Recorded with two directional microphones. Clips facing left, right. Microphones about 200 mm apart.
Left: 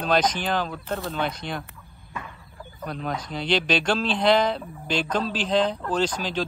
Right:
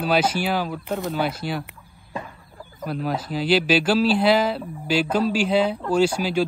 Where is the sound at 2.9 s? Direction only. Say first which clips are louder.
Right 4 dB; 5° right (ahead or behind).